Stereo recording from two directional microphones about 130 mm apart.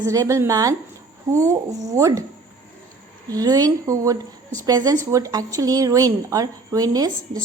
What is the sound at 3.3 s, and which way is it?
A woman's voice, 30° right (ahead or behind).